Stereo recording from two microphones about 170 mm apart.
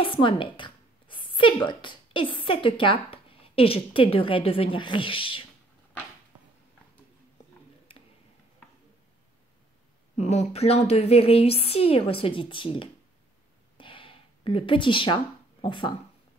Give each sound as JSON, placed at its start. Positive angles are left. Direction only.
{"t": 0.0, "sound": "speech", "side_deg": 30}
{"t": 7.9, "sound": "tick-tock", "side_deg": 35}
{"t": 10.1, "sound": "a woman's voice", "side_deg": 40}
{"t": 13.7, "sound": "a sound", "side_deg": 30}